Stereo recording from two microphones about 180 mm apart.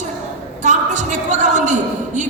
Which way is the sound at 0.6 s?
40° right (ahead or behind).